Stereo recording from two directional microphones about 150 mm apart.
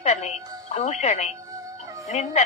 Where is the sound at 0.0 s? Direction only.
45° left (ahead or behind).